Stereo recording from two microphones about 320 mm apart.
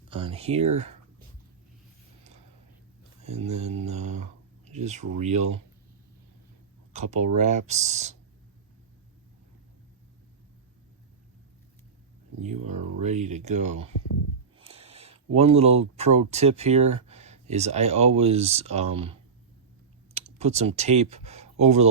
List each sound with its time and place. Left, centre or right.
0.1 s speech: centre
3.2 s speech: right
6.9 s speech: right
12.4 s speech: right
14.6 s a sound: centre
15.4 s speech: centre
20.4 s speech: centre